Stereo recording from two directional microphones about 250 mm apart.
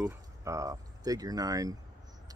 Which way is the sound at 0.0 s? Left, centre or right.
Centre.